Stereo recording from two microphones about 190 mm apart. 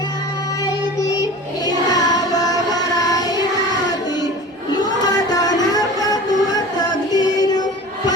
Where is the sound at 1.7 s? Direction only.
20° left (ahead or behind).